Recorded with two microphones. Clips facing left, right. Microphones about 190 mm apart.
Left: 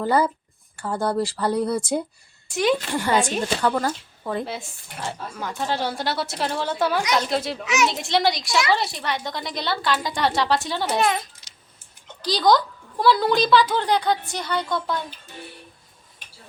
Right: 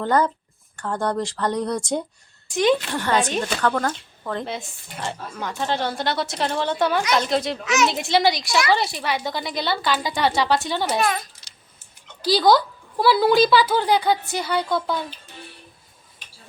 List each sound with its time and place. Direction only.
0.0 s speech: 10° left (ahead or behind)
7.9 s speech: centre (ahead or behind)
11.0 s speech: 20° left (ahead or behind)
12.2 s speech: 5° right (ahead or behind)